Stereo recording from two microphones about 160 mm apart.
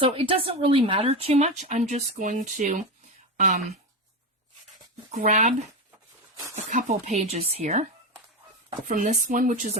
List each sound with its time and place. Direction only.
0.0 s speech: 35° right (ahead or behind); by 3.6 s 50° right (ahead or behind)
5.1 s speech: 50° right (ahead or behind)
6.7 s speech: 50° right (ahead or behind)
8.9 s speech: 55° right (ahead or behind)